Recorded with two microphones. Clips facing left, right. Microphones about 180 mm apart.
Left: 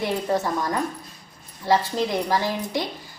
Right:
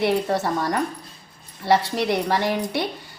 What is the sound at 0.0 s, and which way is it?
A woman's voice, 70° right (ahead or behind).